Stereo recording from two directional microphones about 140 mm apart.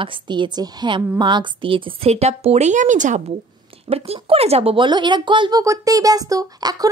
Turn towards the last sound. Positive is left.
turn(degrees=-25)  # may be behind; listen again after turning